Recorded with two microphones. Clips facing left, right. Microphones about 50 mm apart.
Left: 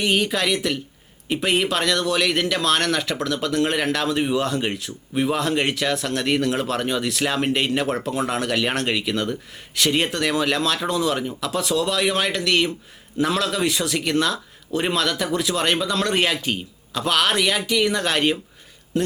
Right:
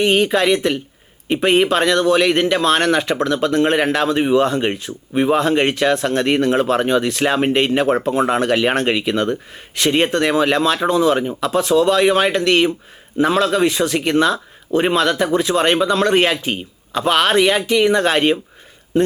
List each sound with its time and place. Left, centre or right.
0.0 s a man's voice: centre